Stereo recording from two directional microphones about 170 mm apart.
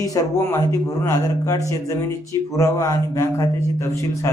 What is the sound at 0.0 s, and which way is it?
Speech, 20° left (ahead or behind).